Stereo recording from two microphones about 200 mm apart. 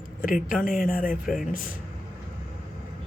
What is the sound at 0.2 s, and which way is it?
Speech, 45° left (ahead or behind).